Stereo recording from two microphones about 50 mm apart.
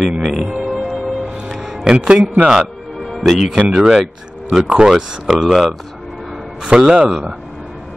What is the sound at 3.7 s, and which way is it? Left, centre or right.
Speech, centre.